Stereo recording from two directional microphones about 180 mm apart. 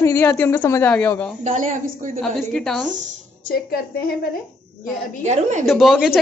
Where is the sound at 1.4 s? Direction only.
45° right (ahead or behind).